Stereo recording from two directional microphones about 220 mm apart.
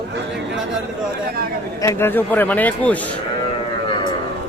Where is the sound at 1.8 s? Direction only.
10° left (ahead or behind).